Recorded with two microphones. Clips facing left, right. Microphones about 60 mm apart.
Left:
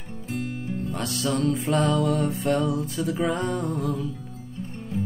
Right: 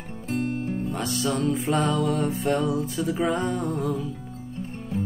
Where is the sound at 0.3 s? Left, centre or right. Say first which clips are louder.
Right 4 dB; right.